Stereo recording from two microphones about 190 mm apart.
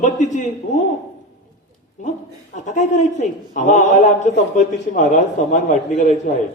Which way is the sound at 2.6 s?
40° left (ahead or behind).